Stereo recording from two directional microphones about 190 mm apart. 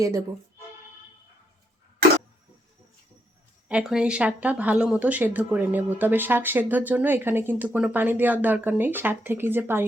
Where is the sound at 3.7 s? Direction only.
5° right (ahead or behind).